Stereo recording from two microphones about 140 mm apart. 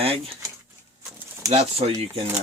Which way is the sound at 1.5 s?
45° right (ahead or behind).